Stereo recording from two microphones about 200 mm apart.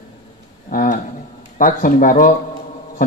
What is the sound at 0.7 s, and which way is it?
A man's voice, 45° left (ahead or behind).